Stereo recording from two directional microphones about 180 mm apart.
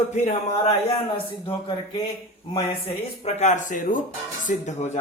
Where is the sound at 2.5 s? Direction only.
30° left (ahead or behind).